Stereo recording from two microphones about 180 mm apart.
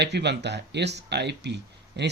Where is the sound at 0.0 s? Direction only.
70° right (ahead or behind).